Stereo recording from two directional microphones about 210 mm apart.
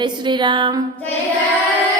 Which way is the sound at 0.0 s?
20° right (ahead or behind).